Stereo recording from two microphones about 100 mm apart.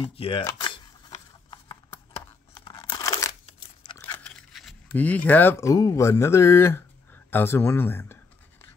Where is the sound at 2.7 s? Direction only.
45° left (ahead or behind).